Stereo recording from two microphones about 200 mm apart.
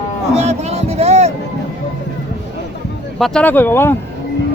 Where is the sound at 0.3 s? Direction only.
30° right (ahead or behind).